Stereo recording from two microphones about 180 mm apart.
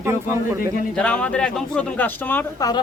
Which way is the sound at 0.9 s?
5° left (ahead or behind).